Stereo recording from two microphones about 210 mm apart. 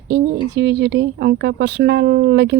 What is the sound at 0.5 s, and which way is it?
A woman's voice, 55° right (ahead or behind).